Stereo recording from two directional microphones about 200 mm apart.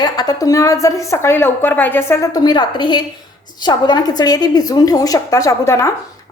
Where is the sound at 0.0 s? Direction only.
20° left (ahead or behind).